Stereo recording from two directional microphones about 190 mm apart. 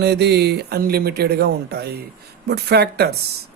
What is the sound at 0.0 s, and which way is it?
Speech, 60° right (ahead or behind).